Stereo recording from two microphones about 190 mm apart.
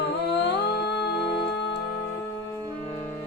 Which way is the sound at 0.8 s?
60° left (ahead or behind).